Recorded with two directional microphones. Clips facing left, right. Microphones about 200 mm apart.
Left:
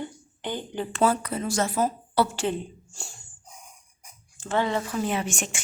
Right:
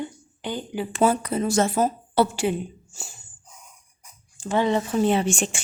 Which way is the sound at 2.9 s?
Centre (ahead or behind).